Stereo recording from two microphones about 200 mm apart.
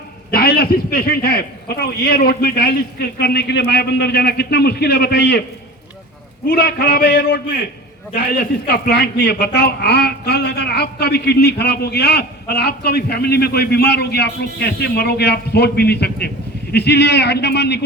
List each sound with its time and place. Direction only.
0.3 s a woman's voice: 50° left (ahead or behind)
6.5 s a woman's voice: 50° left (ahead or behind)
8.6 s a woman's voice: 55° left (ahead or behind)